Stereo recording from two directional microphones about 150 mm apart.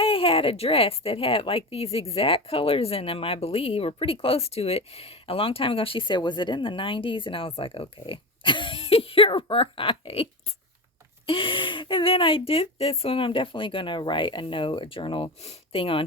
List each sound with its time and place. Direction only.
0.0 s speech: 40° left (ahead or behind)
11.3 s speech: 35° left (ahead or behind)